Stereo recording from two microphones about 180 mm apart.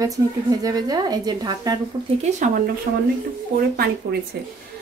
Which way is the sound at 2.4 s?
50° right (ahead or behind).